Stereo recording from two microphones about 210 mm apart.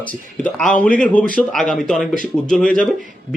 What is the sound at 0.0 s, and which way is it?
A man's voice, 5° left (ahead or behind).